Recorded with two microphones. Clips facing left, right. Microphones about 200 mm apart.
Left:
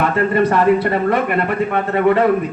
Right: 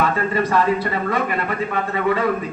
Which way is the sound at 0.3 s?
60° left (ahead or behind).